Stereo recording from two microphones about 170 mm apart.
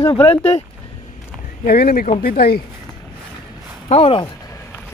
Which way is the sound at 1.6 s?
60° left (ahead or behind).